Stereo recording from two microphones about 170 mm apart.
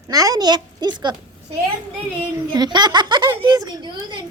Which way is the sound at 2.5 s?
25° right (ahead or behind).